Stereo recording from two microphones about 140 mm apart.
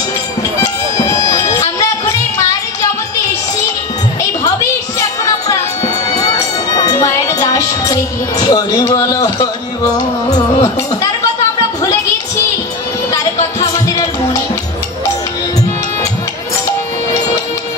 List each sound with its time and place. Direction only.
0.6 s music: 20° left (ahead or behind)
4.9 s music: 25° left (ahead or behind)
13.1 s music: 25° left (ahead or behind)